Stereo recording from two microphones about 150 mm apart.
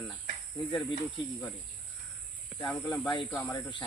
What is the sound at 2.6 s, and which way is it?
Speech, 25° left (ahead or behind).